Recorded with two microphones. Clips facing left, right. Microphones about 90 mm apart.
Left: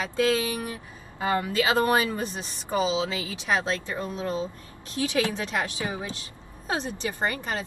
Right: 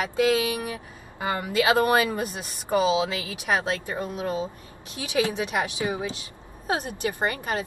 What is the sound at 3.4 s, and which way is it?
Speech, 20° right (ahead or behind).